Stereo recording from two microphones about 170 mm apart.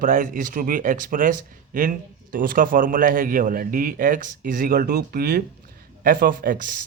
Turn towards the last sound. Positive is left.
turn(degrees=-55)  # may be behind; listen again after turning